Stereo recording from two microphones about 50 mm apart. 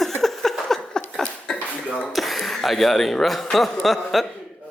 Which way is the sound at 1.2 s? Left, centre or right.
Centre.